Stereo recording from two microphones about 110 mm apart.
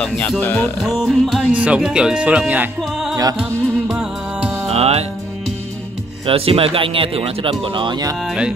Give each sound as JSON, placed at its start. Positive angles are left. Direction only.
{"t": 0.0, "sound": "speech", "side_deg": 15}
{"t": 0.8, "sound": "music", "side_deg": -5}
{"t": 1.5, "sound": "speech", "side_deg": -10}
{"t": 3.3, "sound": "music", "side_deg": -5}
{"t": 4.6, "sound": "music", "side_deg": -70}
{"t": 6.2, "sound": "speech", "side_deg": -60}